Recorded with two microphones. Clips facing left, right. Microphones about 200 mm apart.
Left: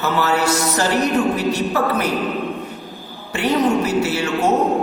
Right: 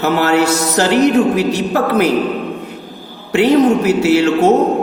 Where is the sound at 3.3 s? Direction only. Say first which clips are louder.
Right 7 dB; 70° right (ahead or behind).